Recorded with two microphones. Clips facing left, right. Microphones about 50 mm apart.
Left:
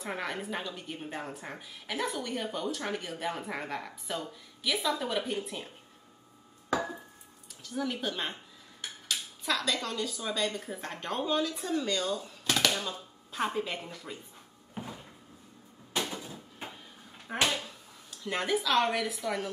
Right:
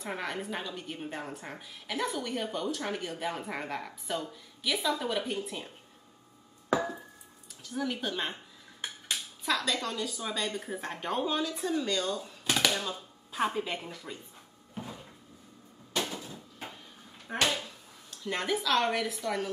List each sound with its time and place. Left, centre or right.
0.0 s a woman's voice: centre
7.6 s a woman's voice: centre
9.4 s a woman's voice: centre
14.8 s cupboard open or close: left
16.0 s cupboard open or close: centre
17.3 s a sound: centre
18.2 s a woman's voice: centre